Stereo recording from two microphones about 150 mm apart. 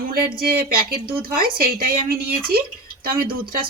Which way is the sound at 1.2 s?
80° right.